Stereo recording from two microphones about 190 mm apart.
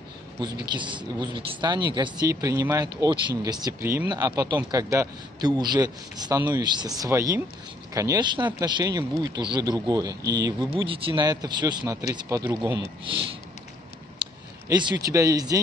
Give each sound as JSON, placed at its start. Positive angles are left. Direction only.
{"t": 0.7, "sound": "speech", "side_deg": -25}
{"t": 14.1, "sound": "speech", "side_deg": -25}